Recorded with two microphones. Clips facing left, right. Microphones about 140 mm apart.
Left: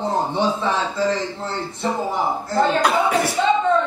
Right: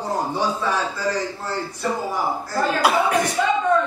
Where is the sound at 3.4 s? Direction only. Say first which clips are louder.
Left 3 dB; 25° left (ahead or behind).